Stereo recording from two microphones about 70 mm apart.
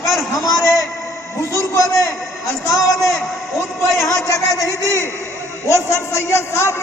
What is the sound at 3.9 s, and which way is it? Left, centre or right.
Speech, centre.